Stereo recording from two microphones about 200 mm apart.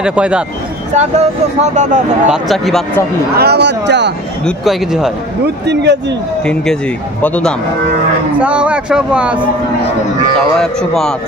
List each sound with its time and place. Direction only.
0.0 s speech: 5° right (ahead or behind)
0.9 s speech: 35° right (ahead or behind)
2.2 s speech: centre (ahead or behind)
3.3 s speech: 55° right (ahead or behind)
4.5 s speech: centre (ahead or behind)
5.7 s speech: 60° right (ahead or behind)
6.4 s speech: 5° left (ahead or behind)
8.4 s speech: 5° right (ahead or behind)
10.6 s speech: centre (ahead or behind)